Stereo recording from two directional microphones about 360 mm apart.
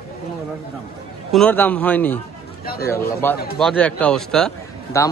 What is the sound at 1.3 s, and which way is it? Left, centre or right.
Speech, centre.